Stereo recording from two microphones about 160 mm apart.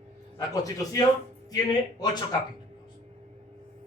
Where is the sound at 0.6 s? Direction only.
20° left (ahead or behind).